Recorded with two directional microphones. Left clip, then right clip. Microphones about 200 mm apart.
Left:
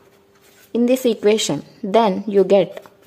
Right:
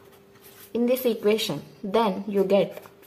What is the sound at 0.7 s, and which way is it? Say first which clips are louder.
Speech: left 6 dB; 40° left (ahead or behind).